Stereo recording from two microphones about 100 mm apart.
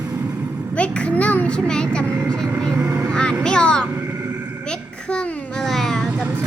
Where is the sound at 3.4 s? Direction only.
10° left (ahead or behind).